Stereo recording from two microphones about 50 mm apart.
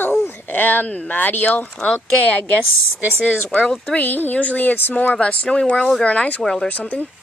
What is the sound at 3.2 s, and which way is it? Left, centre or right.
Speech, centre.